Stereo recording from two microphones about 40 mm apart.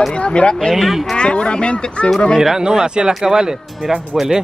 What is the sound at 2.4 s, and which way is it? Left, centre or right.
Speech, centre.